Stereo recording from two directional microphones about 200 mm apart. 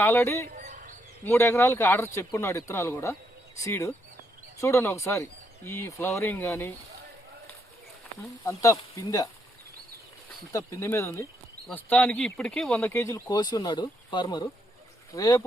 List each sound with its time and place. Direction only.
0.0 s speech: 10° left (ahead or behind)
0.5 s bird: 40° right (ahead or behind)
1.2 s speech: 15° left (ahead or behind)
8.2 s speech: 15° left (ahead or behind)
10.8 s speech: 15° left (ahead or behind)